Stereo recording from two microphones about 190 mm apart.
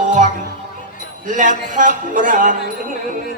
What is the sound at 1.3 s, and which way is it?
Speech, 40° right (ahead or behind).